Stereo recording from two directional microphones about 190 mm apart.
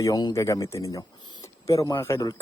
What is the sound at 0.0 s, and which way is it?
A man's voice, 20° left (ahead or behind).